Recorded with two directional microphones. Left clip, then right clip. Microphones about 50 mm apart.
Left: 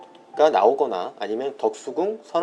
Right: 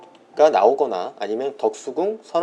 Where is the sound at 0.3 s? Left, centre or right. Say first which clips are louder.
Right 2 dB; right.